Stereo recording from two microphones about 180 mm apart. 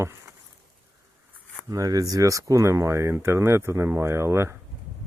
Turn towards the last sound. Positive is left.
turn(degrees=-15)  # may be behind; listen again after turning